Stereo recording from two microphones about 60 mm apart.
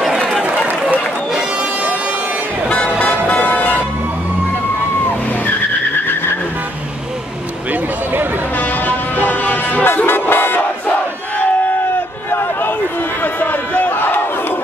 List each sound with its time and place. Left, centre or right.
0.0 s run: centre
2.7 s music: left
8.5 s music: left
10.0 s battle cry: left
13.2 s battle cry: left